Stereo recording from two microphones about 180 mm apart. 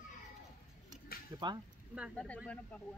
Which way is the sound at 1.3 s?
20° right (ahead or behind).